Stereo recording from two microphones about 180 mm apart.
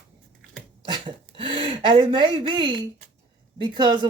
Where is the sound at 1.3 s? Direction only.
30° right (ahead or behind).